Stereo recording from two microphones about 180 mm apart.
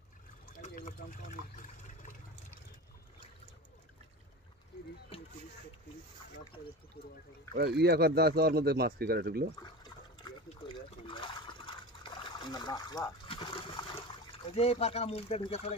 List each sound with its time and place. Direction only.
0.6 s pour: 45° left (ahead or behind)
7.0 s speech: 60° left (ahead or behind)
7.5 s speech: 65° right (ahead or behind)
9.8 s liquid: 25° left (ahead or behind)